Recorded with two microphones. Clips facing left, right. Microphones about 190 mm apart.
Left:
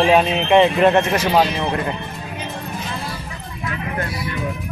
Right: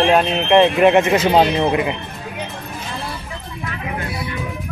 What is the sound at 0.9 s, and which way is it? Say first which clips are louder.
Speech: right 3 dB; 20° right (ahead or behind).